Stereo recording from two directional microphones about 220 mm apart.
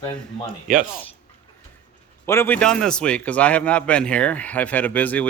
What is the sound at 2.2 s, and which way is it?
A man's voice, 10° left (ahead or behind).